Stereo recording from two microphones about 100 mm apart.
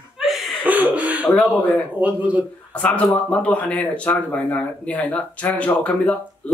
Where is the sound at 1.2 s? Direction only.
15° left (ahead or behind).